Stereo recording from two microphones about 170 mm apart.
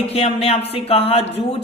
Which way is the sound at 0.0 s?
35° left (ahead or behind).